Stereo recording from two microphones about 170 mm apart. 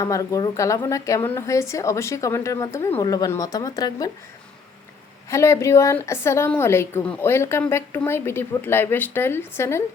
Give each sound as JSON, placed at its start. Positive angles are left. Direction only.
{"t": 0.0, "sound": "a woman's voice", "side_deg": 20}
{"t": 5.3, "sound": "a woman's voice", "side_deg": 15}